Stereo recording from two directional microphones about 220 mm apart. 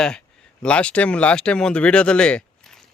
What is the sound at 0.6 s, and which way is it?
A man's voice, 5° left (ahead or behind).